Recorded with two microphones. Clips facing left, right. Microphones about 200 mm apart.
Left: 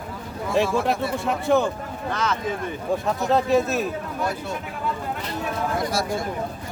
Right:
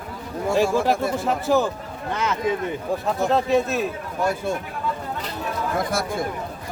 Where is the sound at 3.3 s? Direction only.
Centre (ahead or behind).